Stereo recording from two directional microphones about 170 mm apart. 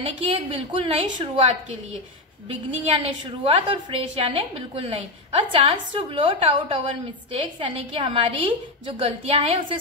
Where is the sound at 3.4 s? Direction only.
30° right (ahead or behind).